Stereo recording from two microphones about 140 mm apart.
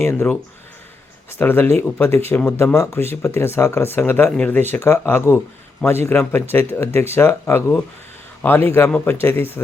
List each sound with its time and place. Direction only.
0.0 s speech: 15° left (ahead or behind)